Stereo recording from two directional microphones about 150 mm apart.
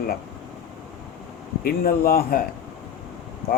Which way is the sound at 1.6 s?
85° left.